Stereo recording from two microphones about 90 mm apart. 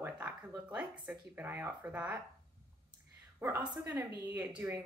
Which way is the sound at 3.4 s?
25° right (ahead or behind).